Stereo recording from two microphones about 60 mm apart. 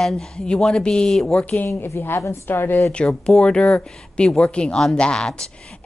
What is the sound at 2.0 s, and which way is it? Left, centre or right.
Speech, left.